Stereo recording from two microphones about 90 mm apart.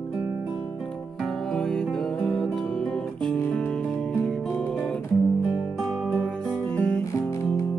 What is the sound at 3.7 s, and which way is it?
Music, 5° left (ahead or behind).